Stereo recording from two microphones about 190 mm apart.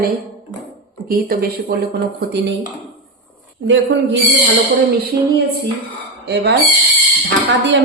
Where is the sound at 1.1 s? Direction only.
50° right (ahead or behind).